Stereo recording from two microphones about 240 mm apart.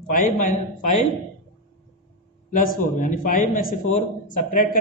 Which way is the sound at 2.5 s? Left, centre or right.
Left.